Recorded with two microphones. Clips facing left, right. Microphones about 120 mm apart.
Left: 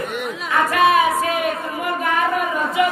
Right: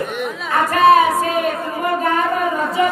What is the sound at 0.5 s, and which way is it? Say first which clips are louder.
Female singing: right 4 dB; 35° right (ahead or behind).